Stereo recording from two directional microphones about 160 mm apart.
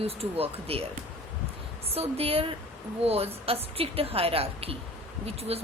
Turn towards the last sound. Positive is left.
turn(degrees=-40)  # may be behind; listen again after turning